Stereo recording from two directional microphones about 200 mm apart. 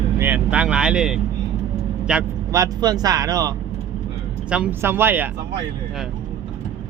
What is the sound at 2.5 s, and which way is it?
Speech, 15° right (ahead or behind).